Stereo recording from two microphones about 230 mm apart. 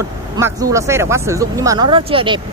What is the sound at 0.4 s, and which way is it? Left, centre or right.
Speech, centre.